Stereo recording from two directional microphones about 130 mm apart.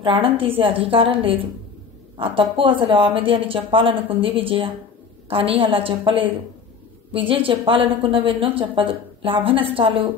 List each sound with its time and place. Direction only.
0.0 s a woman's voice: 40° right (ahead or behind)